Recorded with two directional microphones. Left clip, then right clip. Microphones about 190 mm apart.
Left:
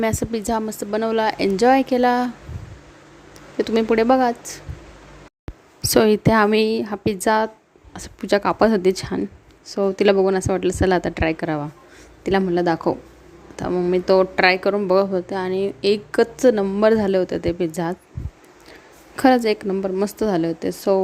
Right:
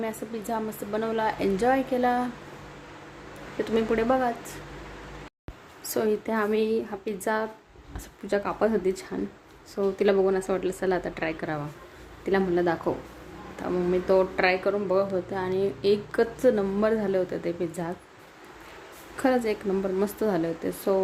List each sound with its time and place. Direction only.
0.0 s speech: 55° left (ahead or behind)
3.6 s speech: 50° left (ahead or behind)
5.9 s a woman's voice: 50° left (ahead or behind)
19.1 s a woman's voice: 50° left (ahead or behind)